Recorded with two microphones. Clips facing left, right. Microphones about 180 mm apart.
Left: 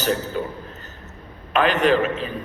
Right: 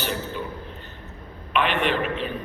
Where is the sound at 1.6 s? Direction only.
40° left (ahead or behind).